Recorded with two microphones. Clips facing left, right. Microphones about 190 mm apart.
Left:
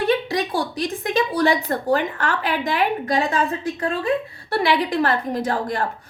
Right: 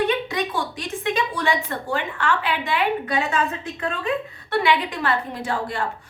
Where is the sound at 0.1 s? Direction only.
35° left (ahead or behind).